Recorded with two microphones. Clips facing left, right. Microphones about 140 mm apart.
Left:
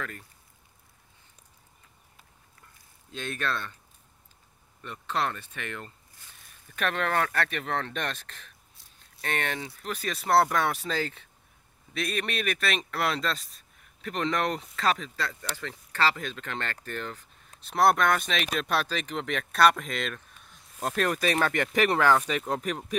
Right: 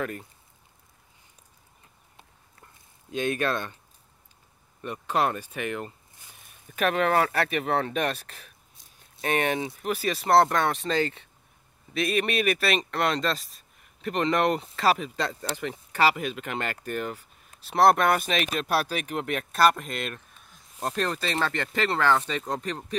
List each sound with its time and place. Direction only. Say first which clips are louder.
0.0 s speech: right 7 dB; 20° right (ahead or behind)
3.1 s speech: right 6 dB; 15° right (ahead or behind)
4.8 s speech: right 4 dB; 15° right (ahead or behind)
9.9 s speech: right 3 dB; centre (ahead or behind)
15.5 s speech: right 5 dB; 20° right (ahead or behind); by 22.9 s 10° left (ahead or behind)